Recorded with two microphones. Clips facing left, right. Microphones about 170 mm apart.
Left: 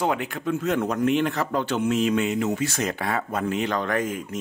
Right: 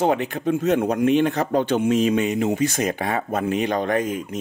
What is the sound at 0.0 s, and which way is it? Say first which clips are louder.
Speech: right 5 dB; 25° right (ahead or behind).